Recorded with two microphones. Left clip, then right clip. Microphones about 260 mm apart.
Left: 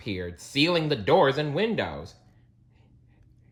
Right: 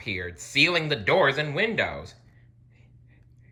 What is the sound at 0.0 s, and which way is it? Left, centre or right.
A woman's voice, centre.